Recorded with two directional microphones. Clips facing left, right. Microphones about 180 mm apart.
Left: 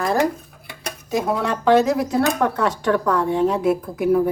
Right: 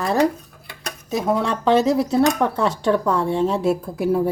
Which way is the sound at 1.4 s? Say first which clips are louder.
Left 2 dB; 25° right (ahead or behind).